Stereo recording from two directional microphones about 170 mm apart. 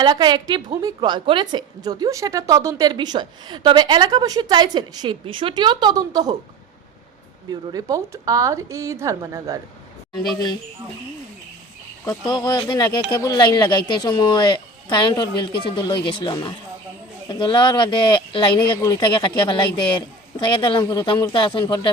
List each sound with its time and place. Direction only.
0.0 s a woman's voice: 25° right (ahead or behind)
7.5 s a woman's voice: 20° right (ahead or behind)
12.0 s speech: 25° left (ahead or behind)